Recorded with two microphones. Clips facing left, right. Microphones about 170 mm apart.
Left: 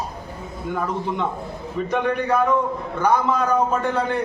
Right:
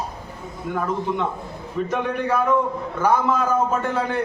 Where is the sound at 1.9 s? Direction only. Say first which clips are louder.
Left 3 dB; centre (ahead or behind).